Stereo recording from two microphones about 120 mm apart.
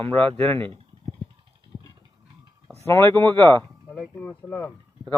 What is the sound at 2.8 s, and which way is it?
Speech, 20° left (ahead or behind).